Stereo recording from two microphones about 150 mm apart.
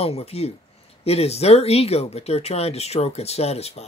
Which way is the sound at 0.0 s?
40° left (ahead or behind).